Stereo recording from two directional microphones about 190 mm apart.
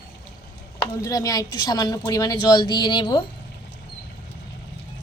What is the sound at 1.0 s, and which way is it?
A woman's voice, 20° left (ahead or behind).